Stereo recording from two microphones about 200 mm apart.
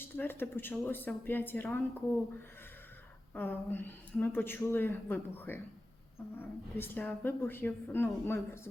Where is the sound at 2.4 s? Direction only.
10° left (ahead or behind).